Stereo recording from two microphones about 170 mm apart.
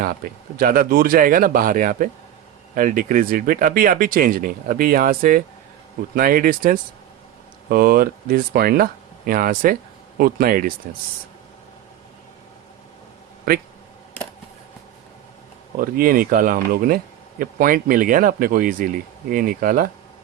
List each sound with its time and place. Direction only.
0.0 s speech: 60° right (ahead or behind)
15.8 s speech: 55° right (ahead or behind)